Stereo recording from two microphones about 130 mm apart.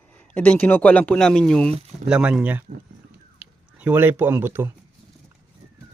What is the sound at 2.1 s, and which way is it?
Speech, 5° right (ahead or behind).